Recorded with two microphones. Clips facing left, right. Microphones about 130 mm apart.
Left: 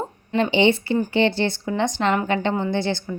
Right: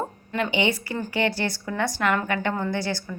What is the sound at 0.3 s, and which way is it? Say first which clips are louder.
A woman's voice: left 6 dB; 30° left (ahead or behind).